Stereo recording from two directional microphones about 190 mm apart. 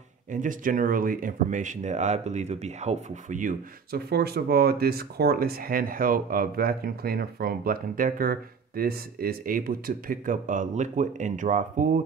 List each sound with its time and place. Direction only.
0.3 s speech: 45° right (ahead or behind)